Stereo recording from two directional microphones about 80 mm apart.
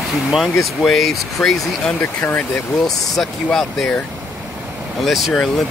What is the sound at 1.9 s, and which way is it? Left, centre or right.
Speech, left.